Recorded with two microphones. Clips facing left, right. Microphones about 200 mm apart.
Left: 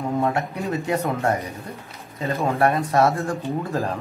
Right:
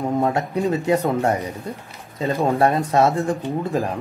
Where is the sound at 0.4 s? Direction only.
20° right (ahead or behind).